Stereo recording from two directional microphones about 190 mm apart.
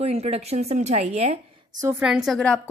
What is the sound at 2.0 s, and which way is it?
Speech, centre (ahead or behind).